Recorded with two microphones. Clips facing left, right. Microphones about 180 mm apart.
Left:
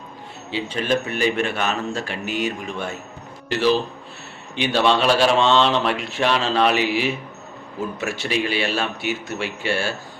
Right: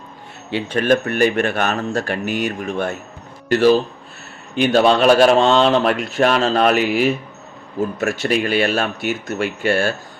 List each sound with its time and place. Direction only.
0.7 s speech: 55° right (ahead or behind)